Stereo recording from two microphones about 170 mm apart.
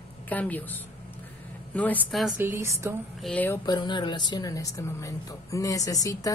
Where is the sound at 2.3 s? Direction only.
15° right (ahead or behind).